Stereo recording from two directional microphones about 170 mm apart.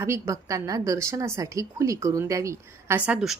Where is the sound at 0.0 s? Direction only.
15° right (ahead or behind).